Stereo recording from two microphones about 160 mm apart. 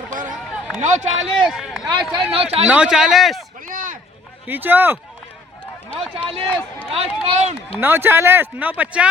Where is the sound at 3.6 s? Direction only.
60° right (ahead or behind).